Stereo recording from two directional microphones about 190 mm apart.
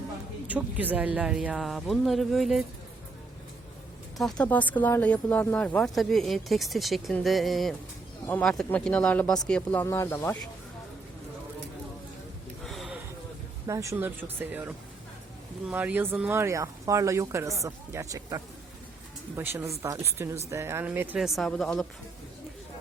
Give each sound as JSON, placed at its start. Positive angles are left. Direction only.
{"t": 0.4, "sound": "speech", "side_deg": -10}
{"t": 4.2, "sound": "speech", "side_deg": 5}
{"t": 12.6, "sound": "a sound", "side_deg": 0}
{"t": 13.7, "sound": "speech", "side_deg": -15}